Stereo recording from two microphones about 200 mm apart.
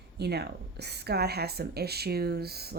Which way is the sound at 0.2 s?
55° right (ahead or behind).